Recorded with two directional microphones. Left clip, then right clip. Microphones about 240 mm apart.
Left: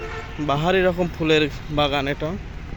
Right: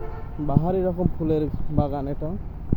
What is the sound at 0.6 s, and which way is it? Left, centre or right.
Speech, centre.